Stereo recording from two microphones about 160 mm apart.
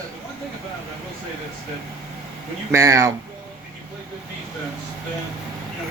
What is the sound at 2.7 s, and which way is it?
Speech, 20° right (ahead or behind).